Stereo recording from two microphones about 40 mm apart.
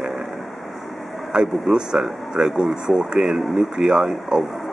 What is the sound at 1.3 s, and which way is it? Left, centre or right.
Speech, centre.